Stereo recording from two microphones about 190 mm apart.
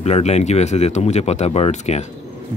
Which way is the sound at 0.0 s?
35° left (ahead or behind).